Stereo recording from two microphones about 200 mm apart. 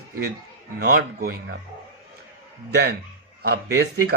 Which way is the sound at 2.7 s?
55° right (ahead or behind).